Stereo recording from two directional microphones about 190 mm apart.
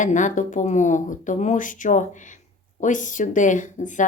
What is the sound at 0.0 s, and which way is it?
Speech, 40° left (ahead or behind).